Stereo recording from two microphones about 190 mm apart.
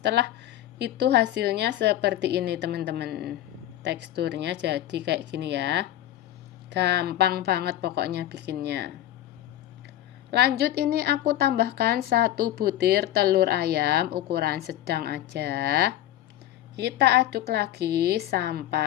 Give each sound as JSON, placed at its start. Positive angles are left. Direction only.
{"t": 0.0, "sound": "a woman's voice", "side_deg": -65}
{"t": 10.3, "sound": "a woman's voice", "side_deg": -60}